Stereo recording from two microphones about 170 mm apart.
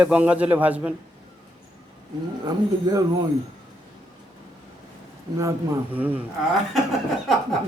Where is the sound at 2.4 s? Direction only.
20° right (ahead or behind).